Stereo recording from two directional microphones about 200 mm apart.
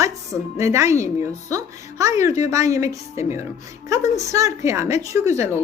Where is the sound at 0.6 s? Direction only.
15° right (ahead or behind).